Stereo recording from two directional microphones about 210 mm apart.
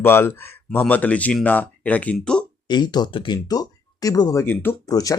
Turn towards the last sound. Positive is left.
turn(degrees=15)  # may be behind; listen again after turning